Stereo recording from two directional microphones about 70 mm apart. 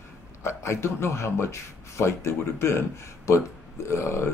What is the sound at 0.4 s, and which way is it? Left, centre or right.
Speech, left.